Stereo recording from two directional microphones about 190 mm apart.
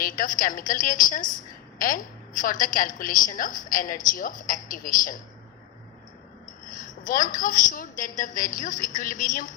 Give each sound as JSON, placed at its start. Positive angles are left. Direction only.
{"t": 0.0, "sound": "a woman's voice", "side_deg": 45}
{"t": 6.7, "sound": "a woman's voice", "side_deg": 45}